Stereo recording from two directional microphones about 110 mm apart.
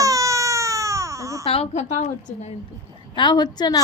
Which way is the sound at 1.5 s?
60° left (ahead or behind).